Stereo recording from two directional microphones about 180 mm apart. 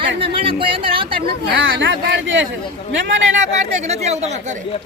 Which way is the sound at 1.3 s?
80° right.